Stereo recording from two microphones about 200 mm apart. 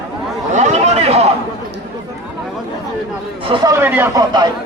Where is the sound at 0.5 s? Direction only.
35° right (ahead or behind).